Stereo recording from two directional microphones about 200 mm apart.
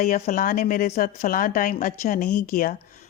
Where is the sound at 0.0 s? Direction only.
40° left (ahead or behind).